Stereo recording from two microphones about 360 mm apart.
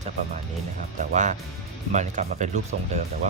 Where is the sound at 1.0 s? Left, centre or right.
Right.